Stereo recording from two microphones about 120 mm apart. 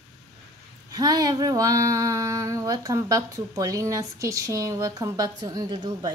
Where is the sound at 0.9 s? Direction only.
30° right (ahead or behind).